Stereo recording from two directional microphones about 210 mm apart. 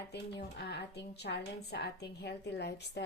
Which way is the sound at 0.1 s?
50° left (ahead or behind).